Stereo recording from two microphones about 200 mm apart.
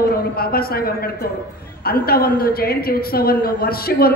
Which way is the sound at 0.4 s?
50° left (ahead or behind).